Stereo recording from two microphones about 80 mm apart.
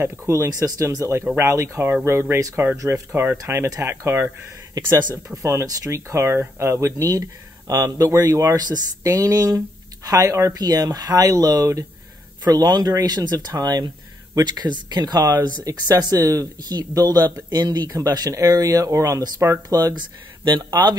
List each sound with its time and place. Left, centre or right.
0.0 s speech: right
3.1 s speech: right
3.4 s speech: right
4.7 s speech: right
7.1 s speech: right
10.5 s speech: right